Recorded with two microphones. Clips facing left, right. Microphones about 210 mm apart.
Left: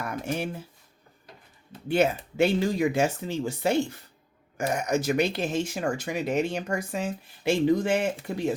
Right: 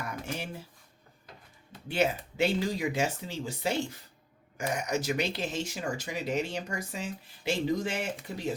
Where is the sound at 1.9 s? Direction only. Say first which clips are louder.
Left 5 dB; 55° left (ahead or behind).